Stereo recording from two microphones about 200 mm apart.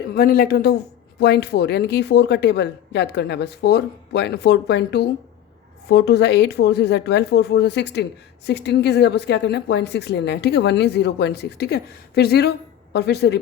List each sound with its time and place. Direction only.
0.1 s a woman's voice: 50° left (ahead or behind)